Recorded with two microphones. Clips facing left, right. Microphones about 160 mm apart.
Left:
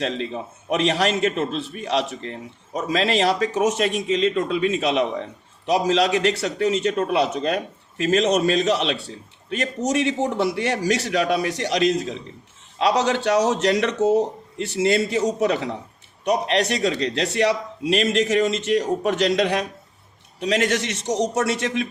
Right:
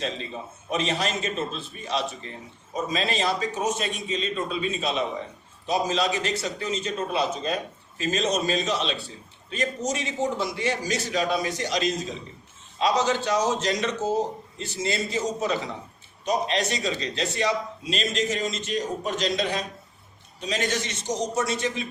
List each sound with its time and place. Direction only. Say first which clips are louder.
0.0 s a man's voice: left 6 dB; 70° left (ahead or behind)